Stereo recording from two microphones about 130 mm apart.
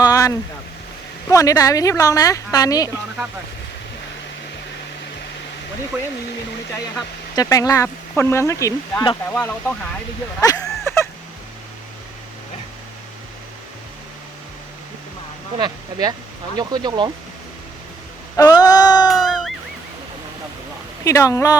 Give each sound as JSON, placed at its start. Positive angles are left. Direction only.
{"t": 0.0, "sound": "a sound", "side_deg": 25}
{"t": 1.3, "sound": "speech", "side_deg": 25}
{"t": 5.9, "sound": "speech", "side_deg": -5}
{"t": 7.3, "sound": "speech", "side_deg": 25}
{"t": 9.3, "sound": "speech", "side_deg": 10}
{"t": 10.4, "sound": "a sound", "side_deg": 25}
{"t": 15.5, "sound": "speech", "side_deg": -30}
{"t": 18.3, "sound": "a sound", "side_deg": 30}
{"t": 19.2, "sound": "music", "side_deg": 0}
{"t": 21.0, "sound": "speech", "side_deg": 25}